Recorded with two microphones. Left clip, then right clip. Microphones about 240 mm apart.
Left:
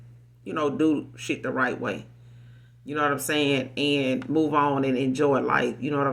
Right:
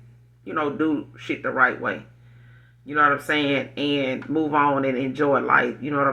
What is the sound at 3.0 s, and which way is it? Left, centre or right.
Speech, left.